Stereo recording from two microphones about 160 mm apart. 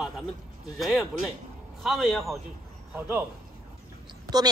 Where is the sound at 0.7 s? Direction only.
Centre (ahead or behind).